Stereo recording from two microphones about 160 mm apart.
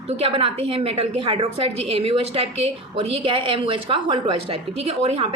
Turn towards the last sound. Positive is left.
turn(degrees=-40)  # may be behind; listen again after turning